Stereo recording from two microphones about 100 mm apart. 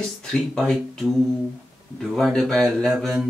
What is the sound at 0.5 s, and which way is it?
A man's voice, 5° left (ahead or behind).